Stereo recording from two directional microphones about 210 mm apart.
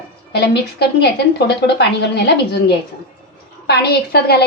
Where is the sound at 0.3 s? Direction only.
55° left (ahead or behind).